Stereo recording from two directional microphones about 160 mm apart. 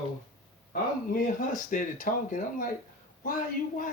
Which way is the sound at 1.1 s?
55° left (ahead or behind).